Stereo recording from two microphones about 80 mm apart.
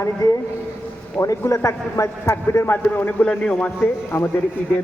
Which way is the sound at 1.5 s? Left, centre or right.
Left.